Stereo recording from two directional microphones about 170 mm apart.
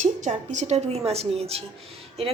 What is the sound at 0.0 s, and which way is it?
A woman's voice, 45° right (ahead or behind).